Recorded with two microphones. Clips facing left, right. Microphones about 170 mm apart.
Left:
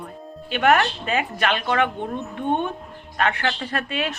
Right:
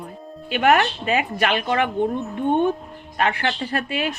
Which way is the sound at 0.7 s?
40° left (ahead or behind).